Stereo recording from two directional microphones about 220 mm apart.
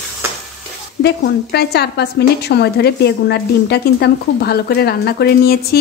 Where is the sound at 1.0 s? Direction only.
50° left (ahead or behind).